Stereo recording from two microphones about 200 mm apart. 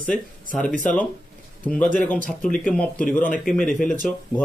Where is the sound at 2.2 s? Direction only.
40° left (ahead or behind).